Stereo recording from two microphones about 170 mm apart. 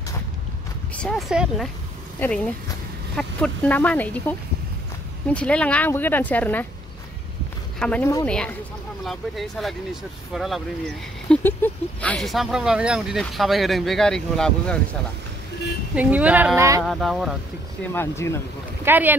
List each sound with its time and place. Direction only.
0.9 s speech: 5° left (ahead or behind)
1.3 s speech: 5° right (ahead or behind)
2.1 s speech: 5° left (ahead or behind)
7.8 s speech: 5° left (ahead or behind)
11.2 s speech: 10° left (ahead or behind)
15.9 s speech: 10° right (ahead or behind)
16.8 s speech: centre (ahead or behind)
17.9 s speech: 15° left (ahead or behind)
18.9 s speech: 10° right (ahead or behind)